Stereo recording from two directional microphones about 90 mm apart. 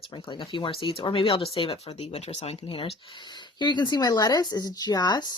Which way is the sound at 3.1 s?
55° left (ahead or behind).